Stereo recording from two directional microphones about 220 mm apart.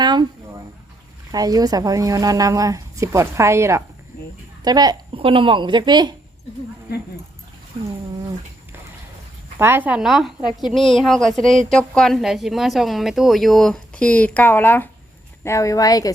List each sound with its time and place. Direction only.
0.0 s a sound: 20° right (ahead or behind)
1.3 s speech: 15° right (ahead or behind)
9.6 s a woman's voice: 10° right (ahead or behind); by 16.1 s 15° left (ahead or behind)